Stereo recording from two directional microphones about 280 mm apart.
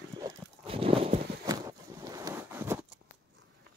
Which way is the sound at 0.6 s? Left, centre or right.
Centre.